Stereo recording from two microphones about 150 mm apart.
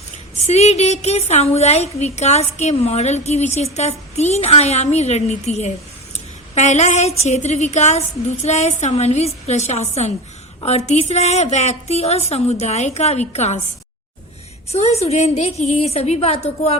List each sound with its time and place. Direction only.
0.3 s a woman's voice: 45° left (ahead or behind)
14.7 s a woman's voice: 45° left (ahead or behind)